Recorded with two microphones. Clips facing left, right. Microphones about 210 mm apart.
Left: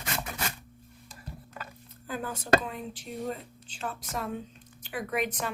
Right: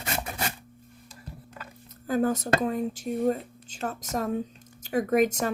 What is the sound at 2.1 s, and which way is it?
Speech, 45° right (ahead or behind).